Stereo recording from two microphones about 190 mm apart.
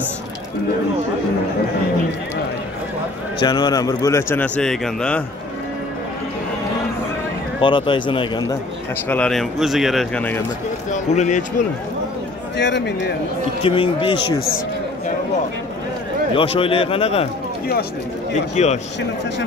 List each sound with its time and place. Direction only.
3.3 s a man's voice: 20° left (ahead or behind); by 5.2 s 5° left (ahead or behind)
7.6 s speech: 25° left (ahead or behind)
9.1 s speech: 5° left (ahead or behind)
10.9 s speech: 40° left (ahead or behind)
12.5 s speech: 65° left (ahead or behind)
13.6 s speech: 30° left (ahead or behind)
16.3 s speech: 30° left (ahead or behind)
18.5 s speech: 35° left (ahead or behind)